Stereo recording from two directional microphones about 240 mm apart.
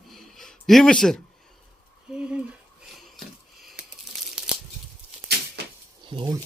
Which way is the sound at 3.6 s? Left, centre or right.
Centre.